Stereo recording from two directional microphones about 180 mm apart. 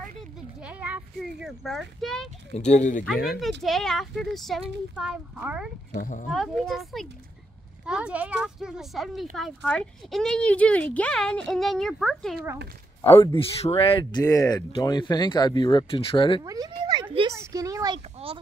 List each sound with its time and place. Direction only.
0.6 s a woman's voice: 5° right (ahead or behind)
2.5 s speech: 40° left (ahead or behind)
3.3 s a woman's voice: centre (ahead or behind)
5.9 s speech: 45° left (ahead or behind)
6.3 s a woman's voice: centre (ahead or behind)
13.0 s speech: 15° left (ahead or behind)
13.3 s speech: 30° left (ahead or behind)
14.2 s speech: 20° left (ahead or behind)
16.4 s a woman's voice: 20° right (ahead or behind)